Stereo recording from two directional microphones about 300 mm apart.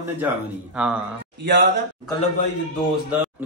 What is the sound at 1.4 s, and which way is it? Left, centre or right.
Speech, right.